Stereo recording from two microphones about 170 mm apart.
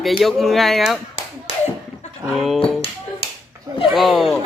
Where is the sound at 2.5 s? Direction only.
35° left (ahead or behind).